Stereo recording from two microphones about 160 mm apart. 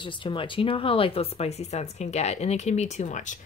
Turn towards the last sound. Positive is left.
turn(degrees=50)  # may be behind; listen again after turning